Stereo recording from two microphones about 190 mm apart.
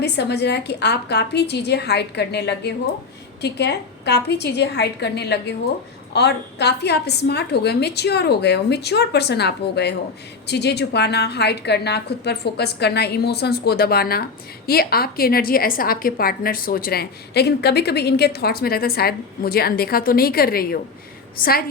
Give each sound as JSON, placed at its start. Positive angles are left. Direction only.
{"t": 0.0, "sound": "a woman's voice", "side_deg": 60}